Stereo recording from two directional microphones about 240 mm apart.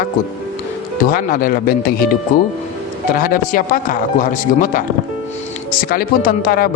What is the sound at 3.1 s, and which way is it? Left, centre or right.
Speech, left.